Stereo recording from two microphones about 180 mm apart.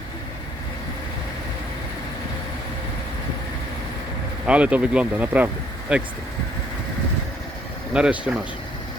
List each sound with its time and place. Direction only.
4.4 s speech: 5° right (ahead or behind)
7.9 s speech: 5° right (ahead or behind)